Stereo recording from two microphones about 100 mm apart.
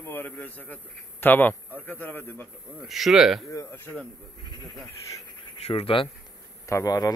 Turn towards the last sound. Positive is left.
turn(degrees=40)  # may be behind; listen again after turning